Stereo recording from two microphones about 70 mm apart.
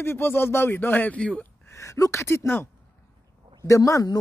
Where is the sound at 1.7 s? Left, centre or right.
Left.